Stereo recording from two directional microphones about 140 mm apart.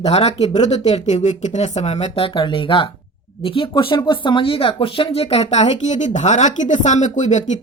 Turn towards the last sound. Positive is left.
turn(degrees=60)  # may be behind; listen again after turning